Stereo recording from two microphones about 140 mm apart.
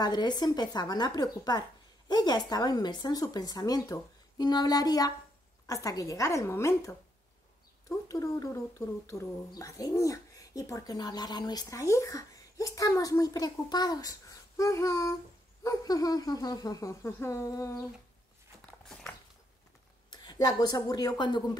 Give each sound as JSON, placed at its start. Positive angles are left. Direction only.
{"t": 0.0, "sound": "speech", "side_deg": 30}
{"t": 8.1, "sound": "speech", "side_deg": 25}
{"t": 18.9, "sound": "a sound", "side_deg": 5}
{"t": 20.1, "sound": "a woman's voice", "side_deg": 30}